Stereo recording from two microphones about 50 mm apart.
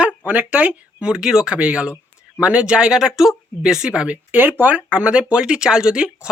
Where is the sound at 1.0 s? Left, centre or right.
Centre.